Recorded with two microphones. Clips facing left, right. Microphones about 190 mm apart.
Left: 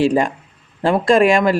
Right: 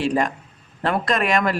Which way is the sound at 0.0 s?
30° left (ahead or behind).